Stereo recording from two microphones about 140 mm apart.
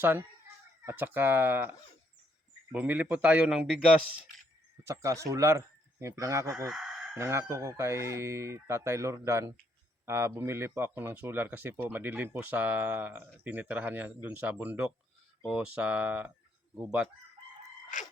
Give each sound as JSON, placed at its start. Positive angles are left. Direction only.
{"t": 0.0, "sound": "speech", "side_deg": -15}
{"t": 2.7, "sound": "speech", "side_deg": -10}
{"t": 4.8, "sound": "speech", "side_deg": -20}
{"t": 6.7, "sound": "chicken", "side_deg": -5}
{"t": 7.2, "sound": "speech", "side_deg": -20}